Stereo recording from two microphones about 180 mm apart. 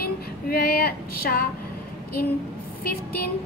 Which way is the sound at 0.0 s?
55° left (ahead or behind).